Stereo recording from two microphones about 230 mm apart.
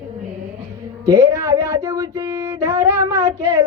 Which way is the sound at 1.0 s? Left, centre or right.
Centre.